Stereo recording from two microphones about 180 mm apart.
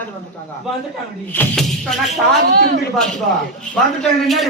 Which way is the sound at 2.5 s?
60° right (ahead or behind).